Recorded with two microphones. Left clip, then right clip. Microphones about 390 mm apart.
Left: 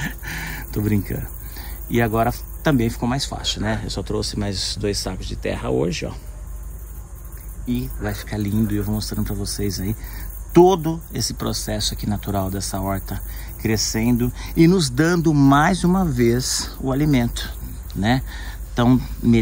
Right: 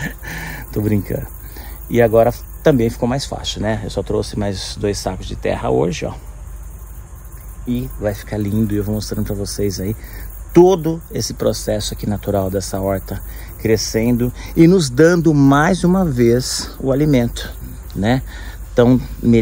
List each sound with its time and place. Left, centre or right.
0.0 s speech: centre
7.6 s speech: centre